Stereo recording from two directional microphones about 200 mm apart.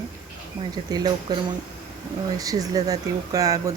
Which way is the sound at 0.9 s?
20° right (ahead or behind).